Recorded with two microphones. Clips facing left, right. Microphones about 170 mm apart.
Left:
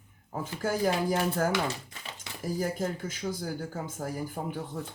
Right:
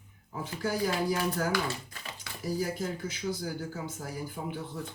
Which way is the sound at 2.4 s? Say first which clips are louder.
Left 1 dB; 45° left (ahead or behind).